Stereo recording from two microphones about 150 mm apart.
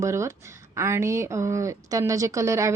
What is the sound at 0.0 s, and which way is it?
A woman's voice, 20° right (ahead or behind).